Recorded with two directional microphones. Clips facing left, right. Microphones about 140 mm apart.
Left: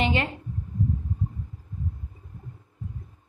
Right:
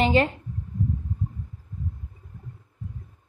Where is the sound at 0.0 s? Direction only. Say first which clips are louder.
Right 5 dB; 35° right (ahead or behind).